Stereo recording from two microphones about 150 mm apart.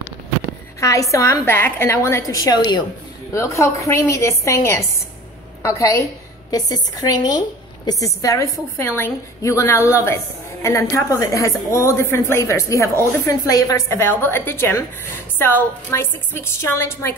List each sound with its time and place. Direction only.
0.7 s a woman's voice: 20° left (ahead or behind)
5.6 s a woman's voice: 20° left (ahead or behind)